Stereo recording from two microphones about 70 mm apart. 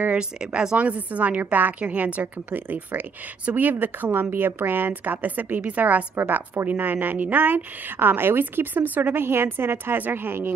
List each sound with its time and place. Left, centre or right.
0.0 s a woman's voice: centre; by 10.5 s right